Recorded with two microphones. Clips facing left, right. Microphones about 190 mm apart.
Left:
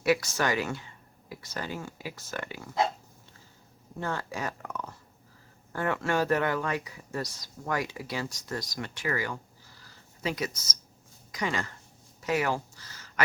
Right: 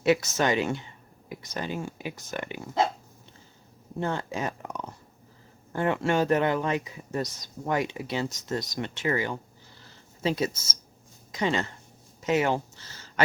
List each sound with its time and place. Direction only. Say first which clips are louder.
0.0 s speech: right 3 dB; 20° right (ahead or behind)
4.0 s speech: right 3 dB; 20° right (ahead or behind)
9.8 s a sound: right 5 dB; 25° right (ahead or behind)
11.3 s speech: right 5 dB; 25° right (ahead or behind)